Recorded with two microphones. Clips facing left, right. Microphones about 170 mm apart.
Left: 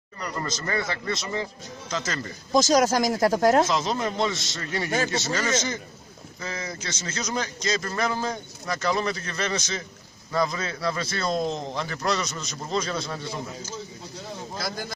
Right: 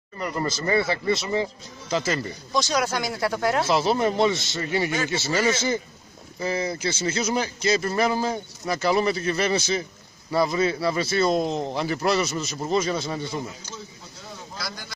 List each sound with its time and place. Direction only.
0.2 s a man's voice: 15° right (ahead or behind)
2.5 s speech: 40° left (ahead or behind)
3.7 s a man's voice: 10° right (ahead or behind)
4.8 s speech: 40° left (ahead or behind)
5.2 s a man's voice: 10° right (ahead or behind)
6.8 s a man's voice: 10° right (ahead or behind)